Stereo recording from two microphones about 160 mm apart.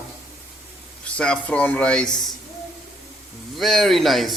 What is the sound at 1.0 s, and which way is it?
Speech, 5° left (ahead or behind).